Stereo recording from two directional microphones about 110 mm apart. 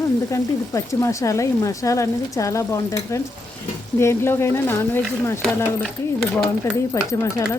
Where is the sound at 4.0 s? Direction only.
25° left (ahead or behind).